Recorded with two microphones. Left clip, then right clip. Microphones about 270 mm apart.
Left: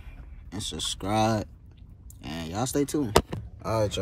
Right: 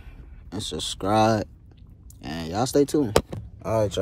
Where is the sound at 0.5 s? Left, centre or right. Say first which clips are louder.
Right 2 dB; centre.